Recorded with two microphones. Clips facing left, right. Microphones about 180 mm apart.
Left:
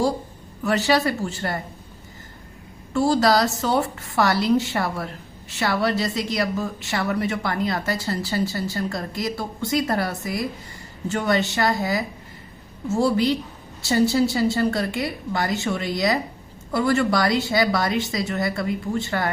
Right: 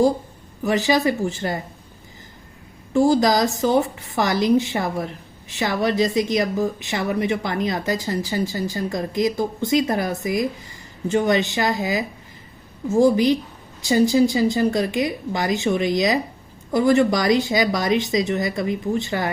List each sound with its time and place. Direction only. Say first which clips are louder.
0.6 s a woman's voice: right 2 dB; 15° right (ahead or behind)
2.9 s a woman's voice: right 2 dB; 15° right (ahead or behind)